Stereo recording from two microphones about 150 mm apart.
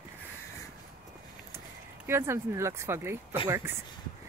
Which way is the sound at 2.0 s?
15° right (ahead or behind).